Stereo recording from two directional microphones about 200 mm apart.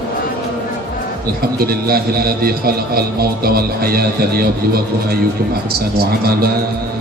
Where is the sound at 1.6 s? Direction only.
50° right (ahead or behind).